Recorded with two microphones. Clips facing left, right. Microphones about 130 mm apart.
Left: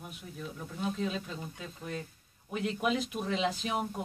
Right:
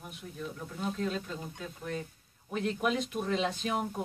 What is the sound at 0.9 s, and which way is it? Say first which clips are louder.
Speech: right 2 dB; 5° left (ahead or behind).